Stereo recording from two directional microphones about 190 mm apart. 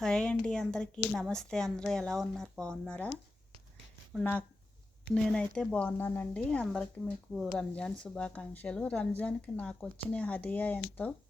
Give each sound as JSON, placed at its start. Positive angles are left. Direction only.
{"t": 0.0, "sound": "a woman's voice", "side_deg": 5}